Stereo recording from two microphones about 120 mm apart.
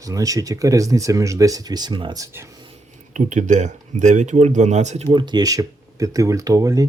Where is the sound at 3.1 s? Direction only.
90° right; by 5.0 s 75° right (ahead or behind).